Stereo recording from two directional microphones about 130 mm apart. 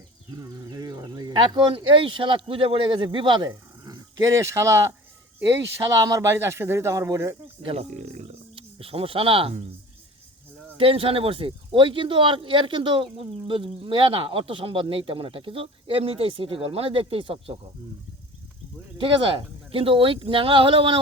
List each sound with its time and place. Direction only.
0.3 s speech: 25° right (ahead or behind)
3.8 s speech: 25° right (ahead or behind)
5.9 s speech: 25° right (ahead or behind)
7.6 s speech: 45° right (ahead or behind)
7.9 s a sound: 70° right (ahead or behind)
8.5 s speech: 45° right (ahead or behind)
10.8 s speech: 45° right (ahead or behind)
18.9 s speech: 40° right (ahead or behind)